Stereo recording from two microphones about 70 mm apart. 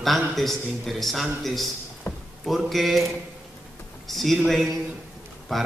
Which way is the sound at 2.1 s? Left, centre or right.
Left.